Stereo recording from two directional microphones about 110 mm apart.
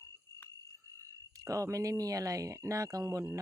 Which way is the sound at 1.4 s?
30° right (ahead or behind).